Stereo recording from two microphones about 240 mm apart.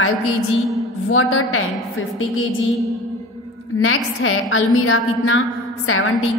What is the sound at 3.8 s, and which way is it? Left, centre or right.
A woman's voice, left.